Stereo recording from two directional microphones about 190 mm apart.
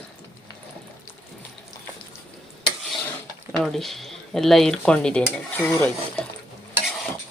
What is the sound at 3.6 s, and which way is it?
Speech, centre (ahead or behind).